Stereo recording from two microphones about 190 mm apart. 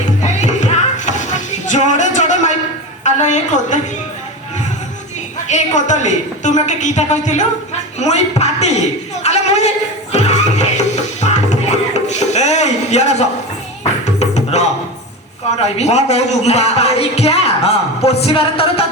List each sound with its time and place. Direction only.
0.2 s music: 40° left (ahead or behind)
3.0 s a woman's voice: 40° left (ahead or behind)
5.5 s speech: 40° left (ahead or behind)
9.2 s music: 35° left (ahead or behind)
15.5 s speech: 35° left (ahead or behind)